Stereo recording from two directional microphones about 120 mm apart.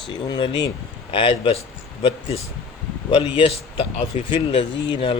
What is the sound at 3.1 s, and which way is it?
Speech, 45° left (ahead or behind).